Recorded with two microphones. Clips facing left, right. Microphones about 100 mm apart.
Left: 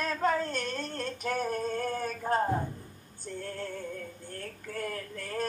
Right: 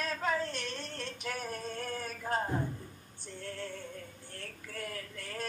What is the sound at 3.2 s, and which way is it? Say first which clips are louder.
Music: left 4 dB; 45° left (ahead or behind).